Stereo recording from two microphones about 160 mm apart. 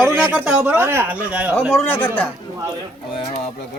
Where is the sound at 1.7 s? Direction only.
15° left (ahead or behind).